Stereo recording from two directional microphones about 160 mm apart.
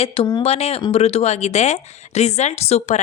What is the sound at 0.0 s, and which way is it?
A woman's voice, 35° left (ahead or behind).